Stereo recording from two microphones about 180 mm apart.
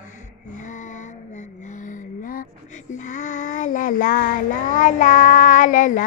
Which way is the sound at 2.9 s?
45° left (ahead or behind).